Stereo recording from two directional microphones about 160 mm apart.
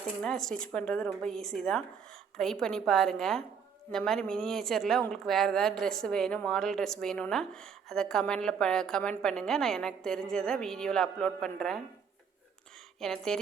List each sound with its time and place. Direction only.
0.2 s a woman's voice: 5° left (ahead or behind)
13.0 s a woman's voice: centre (ahead or behind)